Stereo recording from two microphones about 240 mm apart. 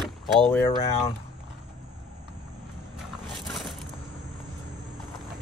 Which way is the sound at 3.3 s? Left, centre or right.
Centre.